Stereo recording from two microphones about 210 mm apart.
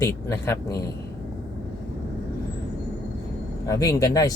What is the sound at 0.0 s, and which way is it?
Speech, 15° left (ahead or behind).